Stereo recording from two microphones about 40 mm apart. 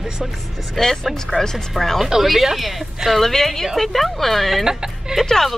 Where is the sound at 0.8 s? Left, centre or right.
Centre.